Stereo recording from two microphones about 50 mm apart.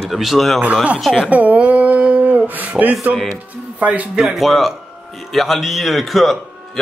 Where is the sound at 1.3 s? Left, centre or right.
Right.